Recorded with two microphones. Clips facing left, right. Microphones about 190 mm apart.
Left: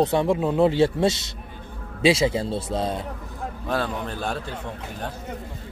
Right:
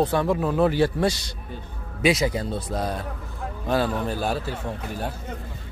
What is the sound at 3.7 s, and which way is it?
Speech, 5° right (ahead or behind).